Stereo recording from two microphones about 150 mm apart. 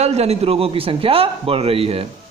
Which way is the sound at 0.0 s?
45° right (ahead or behind).